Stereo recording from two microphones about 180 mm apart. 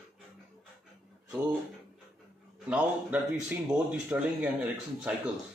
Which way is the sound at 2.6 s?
10° right (ahead or behind).